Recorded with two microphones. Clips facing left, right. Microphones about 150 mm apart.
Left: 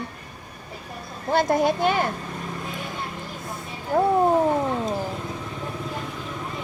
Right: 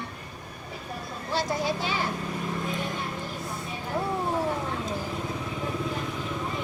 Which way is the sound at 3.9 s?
60° left (ahead or behind).